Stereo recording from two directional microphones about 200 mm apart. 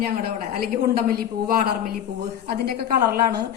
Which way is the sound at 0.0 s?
50° right (ahead or behind).